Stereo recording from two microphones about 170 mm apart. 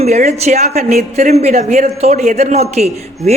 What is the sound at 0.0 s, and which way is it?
A woman's voice, 40° right (ahead or behind).